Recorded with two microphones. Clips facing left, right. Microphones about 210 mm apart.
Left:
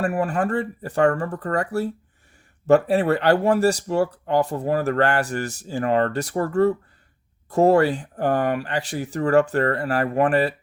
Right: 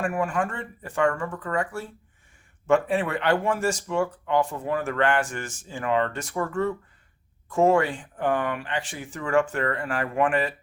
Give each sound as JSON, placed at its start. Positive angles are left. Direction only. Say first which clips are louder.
{"t": 0.0, "sound": "speech", "louder": "left 4 dB", "side_deg": 35}